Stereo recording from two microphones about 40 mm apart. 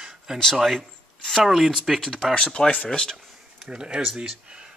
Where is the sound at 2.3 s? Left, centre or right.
Centre.